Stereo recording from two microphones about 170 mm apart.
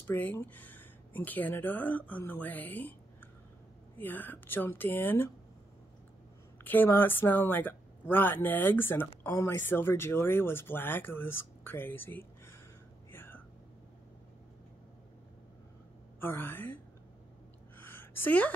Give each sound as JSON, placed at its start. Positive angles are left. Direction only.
{"t": 0.0, "sound": "speech", "side_deg": 10}
{"t": 4.0, "sound": "speech", "side_deg": 10}
{"t": 6.6, "sound": "speech", "side_deg": 10}
{"t": 13.1, "sound": "whispering", "side_deg": 10}
{"t": 16.2, "sound": "speech", "side_deg": 10}
{"t": 17.7, "sound": "a sound", "side_deg": 15}